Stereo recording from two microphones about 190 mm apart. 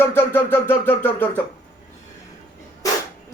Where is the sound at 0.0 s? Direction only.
10° left (ahead or behind).